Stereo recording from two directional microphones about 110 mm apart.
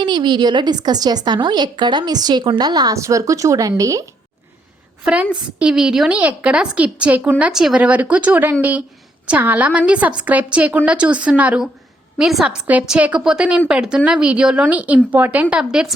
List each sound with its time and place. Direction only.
0.0 s a woman's voice: 45° right (ahead or behind)
5.0 s a woman's voice: 10° right (ahead or behind)